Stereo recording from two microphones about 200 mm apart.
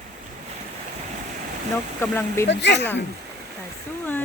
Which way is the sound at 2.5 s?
60° left (ahead or behind).